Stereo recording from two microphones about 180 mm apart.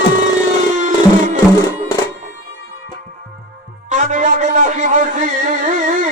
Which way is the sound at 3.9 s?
40° right (ahead or behind).